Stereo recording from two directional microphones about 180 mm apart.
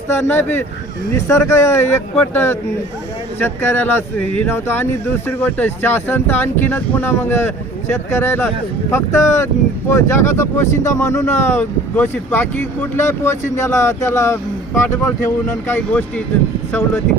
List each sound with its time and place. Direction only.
0.1 s speech: 15° left (ahead or behind)